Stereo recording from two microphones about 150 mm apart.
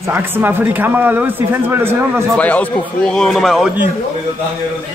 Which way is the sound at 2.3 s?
10° left (ahead or behind).